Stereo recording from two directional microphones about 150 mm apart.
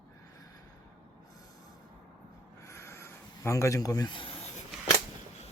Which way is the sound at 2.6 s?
20° left (ahead or behind).